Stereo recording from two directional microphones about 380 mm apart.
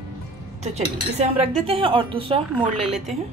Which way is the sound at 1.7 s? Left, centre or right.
Centre.